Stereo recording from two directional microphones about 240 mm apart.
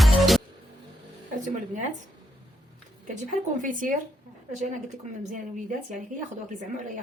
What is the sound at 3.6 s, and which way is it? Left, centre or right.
Speech, right.